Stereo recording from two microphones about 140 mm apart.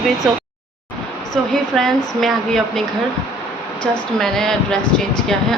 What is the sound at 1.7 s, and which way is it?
Speech, centre (ahead or behind).